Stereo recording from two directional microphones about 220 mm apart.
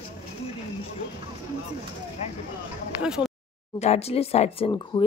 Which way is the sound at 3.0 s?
5° right (ahead or behind).